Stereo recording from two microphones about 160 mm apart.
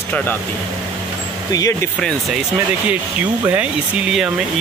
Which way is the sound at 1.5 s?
20° left (ahead or behind).